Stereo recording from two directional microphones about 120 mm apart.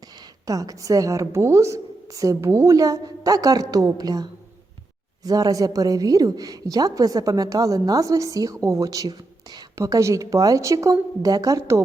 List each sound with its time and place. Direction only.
0.4 s a woman's voice: 30° right (ahead or behind)